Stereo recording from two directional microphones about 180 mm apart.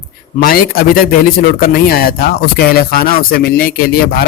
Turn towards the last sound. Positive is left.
turn(degrees=55)  # may be behind; listen again after turning